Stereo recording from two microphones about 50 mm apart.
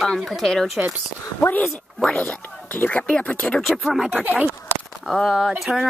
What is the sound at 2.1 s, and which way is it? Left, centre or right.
Speech, left.